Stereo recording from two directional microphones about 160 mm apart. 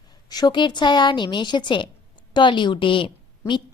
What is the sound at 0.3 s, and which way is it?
A woman's voice, 25° left (ahead or behind).